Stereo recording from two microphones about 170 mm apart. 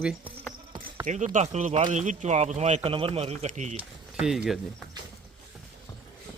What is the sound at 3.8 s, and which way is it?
Speech, 5° right (ahead or behind).